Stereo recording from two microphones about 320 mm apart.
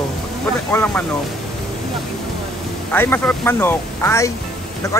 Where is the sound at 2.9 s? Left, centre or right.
Centre.